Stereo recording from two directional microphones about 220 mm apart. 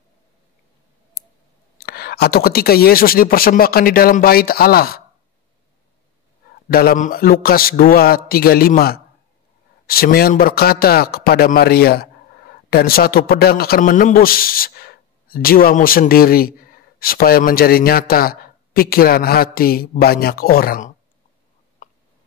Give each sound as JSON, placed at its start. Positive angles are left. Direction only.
{"t": 1.8, "sound": "a man's voice", "side_deg": 45}
{"t": 6.7, "sound": "a man's voice", "side_deg": 45}
{"t": 21.8, "sound": "a sound", "side_deg": 35}